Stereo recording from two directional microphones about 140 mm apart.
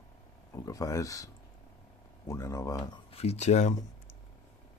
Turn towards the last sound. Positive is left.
turn(degrees=55)  # may be behind; listen again after turning